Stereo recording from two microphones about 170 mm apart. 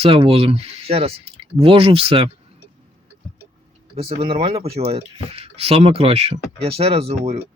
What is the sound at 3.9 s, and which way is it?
Speech, 35° right (ahead or behind).